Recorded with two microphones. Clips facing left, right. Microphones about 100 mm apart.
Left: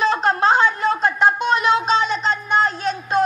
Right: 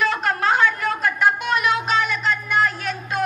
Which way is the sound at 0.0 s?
25° left (ahead or behind).